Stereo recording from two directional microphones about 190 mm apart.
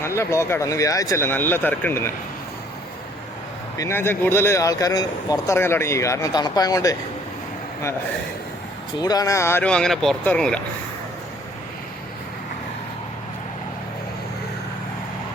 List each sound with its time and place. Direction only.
0.0 s speech: 15° left (ahead or behind)
3.8 s speech: 15° left (ahead or behind)
9.0 s speech: 20° left (ahead or behind)